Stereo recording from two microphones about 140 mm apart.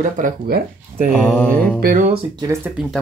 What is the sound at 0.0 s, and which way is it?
Speech, 80° right.